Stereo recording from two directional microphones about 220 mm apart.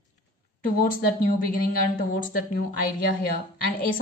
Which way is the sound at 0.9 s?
40° left (ahead or behind).